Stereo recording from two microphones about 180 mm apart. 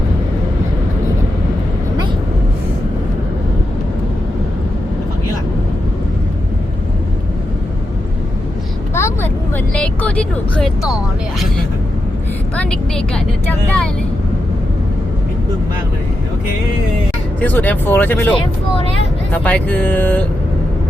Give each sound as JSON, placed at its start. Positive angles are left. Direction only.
{"t": 9.0, "sound": "vehicle", "side_deg": 15}
{"t": 12.5, "sound": "speech", "side_deg": 5}
{"t": 17.4, "sound": "speech", "side_deg": 10}
{"t": 18.3, "sound": "speech", "side_deg": 30}
{"t": 19.3, "sound": "speech", "side_deg": 10}